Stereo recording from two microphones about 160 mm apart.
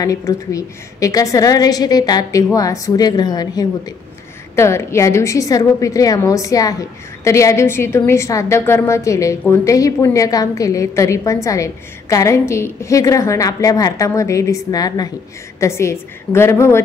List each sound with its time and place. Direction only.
0.0 s a woman's voice: 20° left (ahead or behind)